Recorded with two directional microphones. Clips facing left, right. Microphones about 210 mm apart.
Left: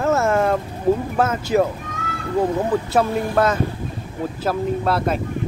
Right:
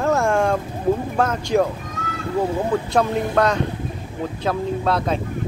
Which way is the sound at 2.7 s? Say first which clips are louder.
Left 1 dB; 5° left (ahead or behind).